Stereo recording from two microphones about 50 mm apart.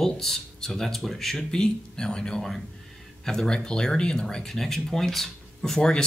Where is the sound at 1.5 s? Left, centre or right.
Centre.